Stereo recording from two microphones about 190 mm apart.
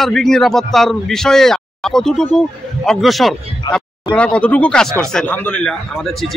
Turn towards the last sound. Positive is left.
turn(degrees=0)  # may be behind; listen again after turning